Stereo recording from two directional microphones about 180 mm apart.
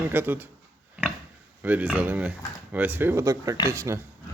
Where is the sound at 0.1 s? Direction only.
10° right (ahead or behind).